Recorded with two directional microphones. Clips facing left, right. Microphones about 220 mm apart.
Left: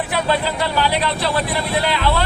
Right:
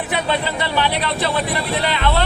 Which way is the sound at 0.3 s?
Centre (ahead or behind).